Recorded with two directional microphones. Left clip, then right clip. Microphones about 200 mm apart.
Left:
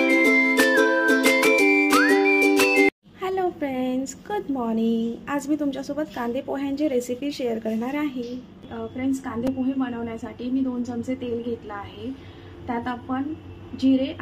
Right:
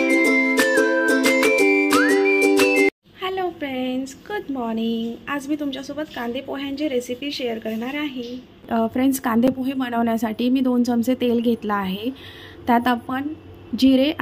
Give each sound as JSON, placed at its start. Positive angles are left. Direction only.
{"t": 0.0, "sound": "music", "side_deg": 0}
{"t": 3.2, "sound": "speech", "side_deg": 10}
{"t": 8.6, "sound": "a woman's voice", "side_deg": -55}